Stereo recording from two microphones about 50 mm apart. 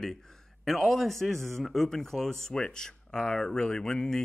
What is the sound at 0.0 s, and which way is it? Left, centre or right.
A man's voice, centre.